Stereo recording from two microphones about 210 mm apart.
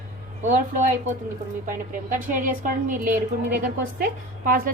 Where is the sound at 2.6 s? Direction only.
40° right (ahead or behind).